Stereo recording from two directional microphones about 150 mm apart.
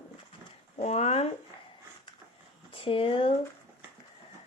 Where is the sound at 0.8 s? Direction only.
45° left (ahead or behind).